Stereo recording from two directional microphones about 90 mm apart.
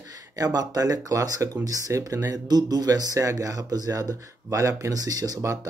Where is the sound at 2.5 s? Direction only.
50° right (ahead or behind).